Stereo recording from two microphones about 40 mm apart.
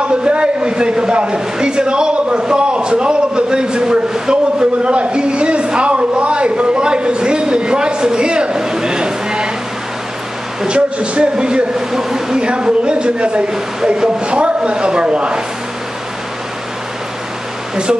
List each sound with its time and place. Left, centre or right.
0.0 s a man's voice: right
10.7 s a man's voice: right
12.4 s a man's voice: right